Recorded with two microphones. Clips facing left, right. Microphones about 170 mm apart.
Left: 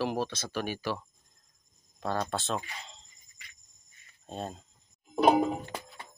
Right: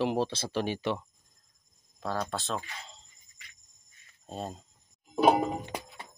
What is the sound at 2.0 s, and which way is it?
Speech, centre (ahead or behind).